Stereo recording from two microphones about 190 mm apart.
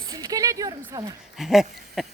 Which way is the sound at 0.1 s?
20° right (ahead or behind).